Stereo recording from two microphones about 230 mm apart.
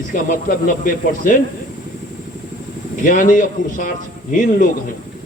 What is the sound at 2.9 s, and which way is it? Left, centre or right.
A man's voice, left.